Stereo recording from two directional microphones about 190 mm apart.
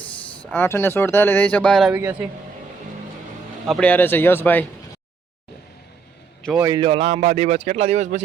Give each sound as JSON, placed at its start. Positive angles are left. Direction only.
{"t": 0.5, "sound": "speech", "side_deg": 10}
{"t": 1.9, "sound": "a man's voice", "side_deg": -15}
{"t": 3.7, "sound": "speech", "side_deg": 5}
{"t": 6.6, "sound": "speech", "side_deg": -20}